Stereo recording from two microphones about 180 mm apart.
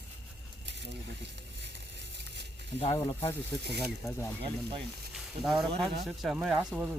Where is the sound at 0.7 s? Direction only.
75° right (ahead or behind).